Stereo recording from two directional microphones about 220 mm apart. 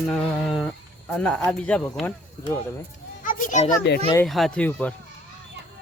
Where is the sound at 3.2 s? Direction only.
35° left (ahead or behind).